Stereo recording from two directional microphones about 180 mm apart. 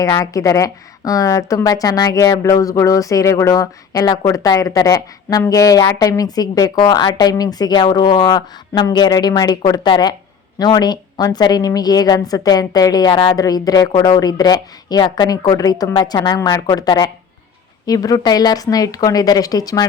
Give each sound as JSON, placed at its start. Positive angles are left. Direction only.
{"t": 0.0, "sound": "a woman's voice", "side_deg": 20}